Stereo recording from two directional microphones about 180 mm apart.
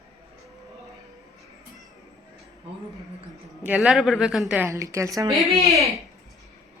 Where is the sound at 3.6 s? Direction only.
5° right (ahead or behind).